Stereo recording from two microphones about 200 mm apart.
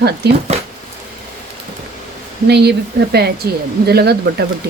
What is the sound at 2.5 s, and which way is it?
Speech, 55° right (ahead or behind).